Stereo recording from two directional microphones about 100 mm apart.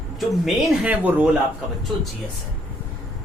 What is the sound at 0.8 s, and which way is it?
Speech, 15° right (ahead or behind).